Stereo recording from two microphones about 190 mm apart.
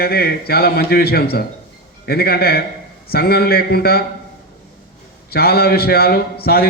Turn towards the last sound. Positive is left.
turn(degrees=55)  # may be behind; listen again after turning